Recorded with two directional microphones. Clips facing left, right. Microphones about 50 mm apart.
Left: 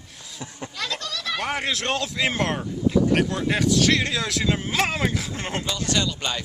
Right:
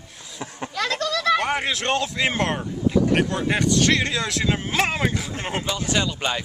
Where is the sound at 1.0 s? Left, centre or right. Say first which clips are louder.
Right 9 dB; right.